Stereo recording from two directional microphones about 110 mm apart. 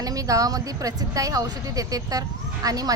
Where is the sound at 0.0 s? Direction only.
35° right (ahead or behind).